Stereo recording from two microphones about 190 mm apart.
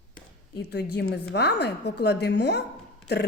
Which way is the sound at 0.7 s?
60° left (ahead or behind).